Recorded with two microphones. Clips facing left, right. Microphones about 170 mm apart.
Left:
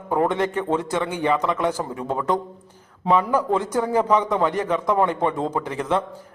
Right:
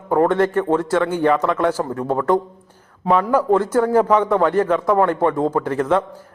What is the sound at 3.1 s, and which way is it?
Speech, 5° left (ahead or behind).